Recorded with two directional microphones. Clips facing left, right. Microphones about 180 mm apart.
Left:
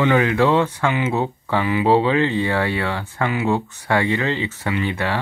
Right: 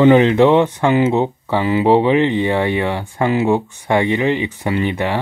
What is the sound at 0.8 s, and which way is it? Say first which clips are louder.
Speech: right 7 dB; 30° right (ahead or behind).